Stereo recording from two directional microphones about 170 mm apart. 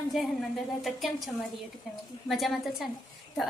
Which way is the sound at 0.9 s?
Centre (ahead or behind).